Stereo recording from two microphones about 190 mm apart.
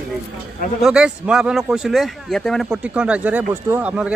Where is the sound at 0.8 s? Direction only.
5° right (ahead or behind).